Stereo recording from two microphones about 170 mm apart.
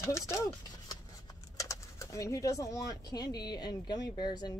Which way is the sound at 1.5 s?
20° left (ahead or behind).